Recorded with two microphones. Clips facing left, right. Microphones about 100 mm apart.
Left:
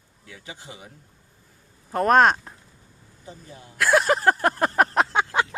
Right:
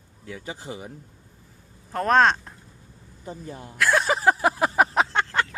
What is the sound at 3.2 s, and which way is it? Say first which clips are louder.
Speech: right 6 dB; 50° right (ahead or behind).